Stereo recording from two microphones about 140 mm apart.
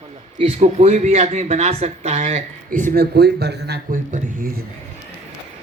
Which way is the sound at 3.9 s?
70° right (ahead or behind).